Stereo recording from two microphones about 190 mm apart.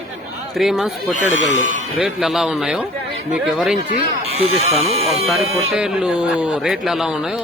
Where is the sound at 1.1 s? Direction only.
40° right (ahead or behind).